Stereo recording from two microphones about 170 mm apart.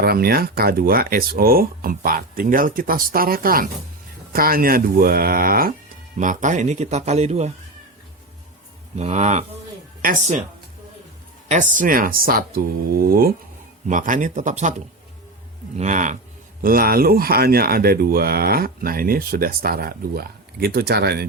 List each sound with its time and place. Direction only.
0.0 s speech: 65° right (ahead or behind)
6.1 s speech: 50° right (ahead or behind)
9.0 s speech: 45° right (ahead or behind)
11.4 s speech: 45° right (ahead or behind)
16.6 s speech: 60° right (ahead or behind)